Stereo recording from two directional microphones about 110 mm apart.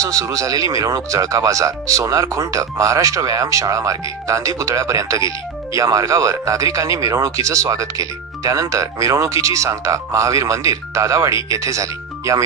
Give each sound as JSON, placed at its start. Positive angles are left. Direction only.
{"t": 0.0, "sound": "speech", "side_deg": -30}